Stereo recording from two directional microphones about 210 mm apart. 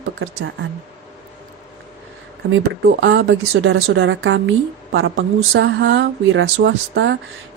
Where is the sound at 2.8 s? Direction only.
60° right (ahead or behind).